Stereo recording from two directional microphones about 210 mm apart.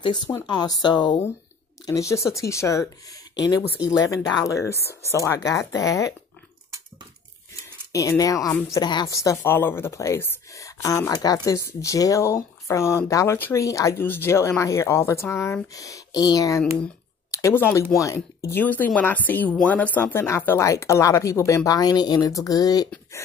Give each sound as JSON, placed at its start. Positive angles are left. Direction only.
{"t": 0.0, "sound": "speech", "side_deg": 20}
{"t": 7.9, "sound": "speech", "side_deg": 15}